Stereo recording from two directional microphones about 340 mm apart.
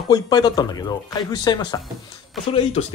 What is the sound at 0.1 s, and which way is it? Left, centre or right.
Speech, centre.